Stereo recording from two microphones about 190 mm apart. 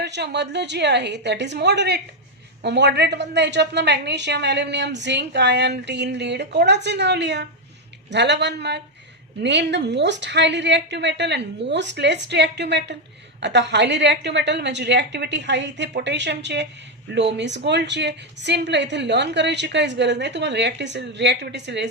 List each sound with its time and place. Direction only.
0.0 s a woman's voice: 65° right (ahead or behind)